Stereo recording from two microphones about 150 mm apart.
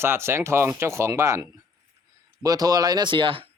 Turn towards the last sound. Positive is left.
turn(degrees=-35)  # may be behind; listen again after turning